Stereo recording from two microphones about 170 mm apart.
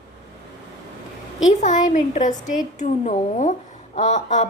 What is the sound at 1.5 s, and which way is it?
A woman's voice, 45° left (ahead or behind).